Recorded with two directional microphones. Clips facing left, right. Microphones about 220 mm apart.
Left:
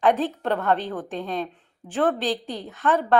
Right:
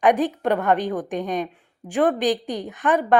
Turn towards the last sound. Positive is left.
turn(degrees=-15)  # may be behind; listen again after turning